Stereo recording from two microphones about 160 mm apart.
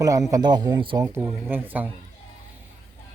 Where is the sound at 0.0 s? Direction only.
20° right (ahead or behind).